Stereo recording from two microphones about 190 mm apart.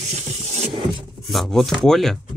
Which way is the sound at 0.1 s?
35° right (ahead or behind).